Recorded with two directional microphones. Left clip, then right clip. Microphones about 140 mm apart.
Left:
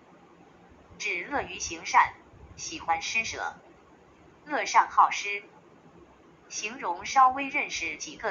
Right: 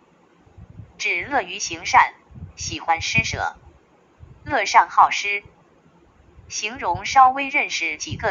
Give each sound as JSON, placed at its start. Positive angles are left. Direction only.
{"t": 0.9, "sound": "a woman's voice", "side_deg": -40}
{"t": 6.5, "sound": "a woman's voice", "side_deg": -40}